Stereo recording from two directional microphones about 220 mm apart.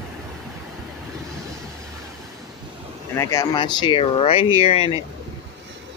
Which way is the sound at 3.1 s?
15° left (ahead or behind).